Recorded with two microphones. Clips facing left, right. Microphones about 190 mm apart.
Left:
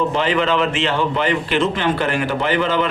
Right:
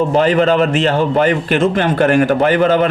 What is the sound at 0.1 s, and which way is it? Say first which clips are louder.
Speech: right 6 dB; 45° right (ahead or behind).